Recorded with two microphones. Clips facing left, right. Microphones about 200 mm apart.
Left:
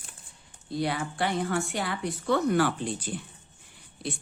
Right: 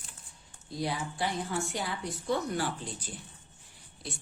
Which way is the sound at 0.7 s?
65° left (ahead or behind).